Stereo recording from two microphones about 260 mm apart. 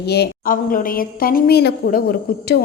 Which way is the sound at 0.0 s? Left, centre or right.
Left.